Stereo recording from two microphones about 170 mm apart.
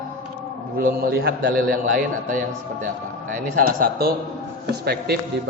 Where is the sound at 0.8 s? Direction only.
55° right (ahead or behind).